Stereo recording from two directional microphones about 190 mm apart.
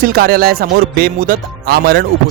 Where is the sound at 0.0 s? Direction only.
50° right (ahead or behind).